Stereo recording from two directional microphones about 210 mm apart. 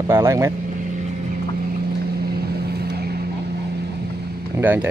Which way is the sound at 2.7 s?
50° right (ahead or behind).